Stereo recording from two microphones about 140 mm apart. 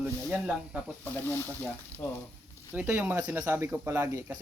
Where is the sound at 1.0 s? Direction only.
15° left (ahead or behind).